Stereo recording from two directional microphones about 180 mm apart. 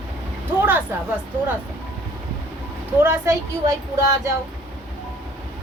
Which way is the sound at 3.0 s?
15° right (ahead or behind).